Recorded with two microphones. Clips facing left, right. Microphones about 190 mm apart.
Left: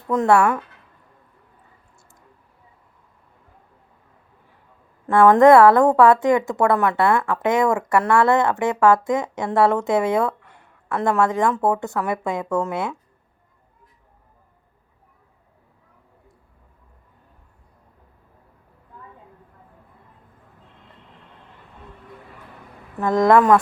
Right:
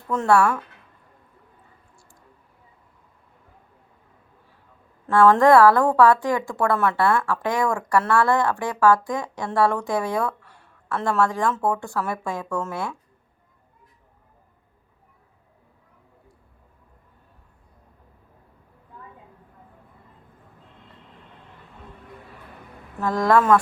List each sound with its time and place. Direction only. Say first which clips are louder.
0.1 s speech: left 2 dB; 20° left (ahead or behind)
5.0 s a woman's voice: left 3 dB; 15° left (ahead or behind)
23.0 s a woman's voice: left 4 dB; 20° left (ahead or behind)